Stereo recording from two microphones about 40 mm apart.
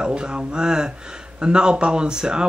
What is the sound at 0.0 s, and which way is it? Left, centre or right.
Speech, right.